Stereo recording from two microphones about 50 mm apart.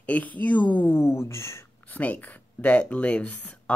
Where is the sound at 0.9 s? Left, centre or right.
Left.